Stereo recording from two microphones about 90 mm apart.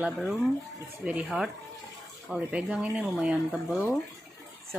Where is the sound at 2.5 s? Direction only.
10° right (ahead or behind).